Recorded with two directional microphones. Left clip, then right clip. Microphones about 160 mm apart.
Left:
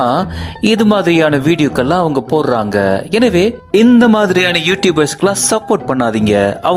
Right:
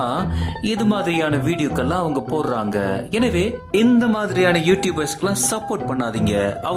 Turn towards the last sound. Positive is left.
turn(degrees=35)  # may be behind; listen again after turning